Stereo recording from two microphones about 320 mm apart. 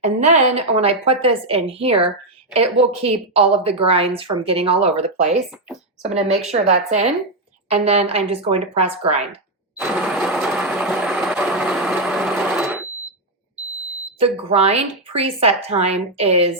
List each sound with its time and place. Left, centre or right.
0.0 s a woman's voice: right
9.7 s a sound: centre
14.2 s speech: centre